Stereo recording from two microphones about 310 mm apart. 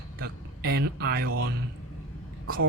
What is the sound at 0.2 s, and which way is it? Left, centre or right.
Speech, right.